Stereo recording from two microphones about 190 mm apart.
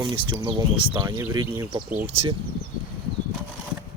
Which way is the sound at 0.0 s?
25° right (ahead or behind).